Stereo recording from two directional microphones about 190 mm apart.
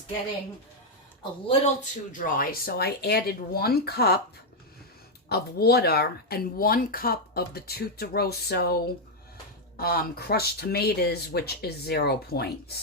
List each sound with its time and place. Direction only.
1.2 s speech: 30° left (ahead or behind); by 4.2 s 55° left (ahead or behind)
5.3 s speech: 55° left (ahead or behind)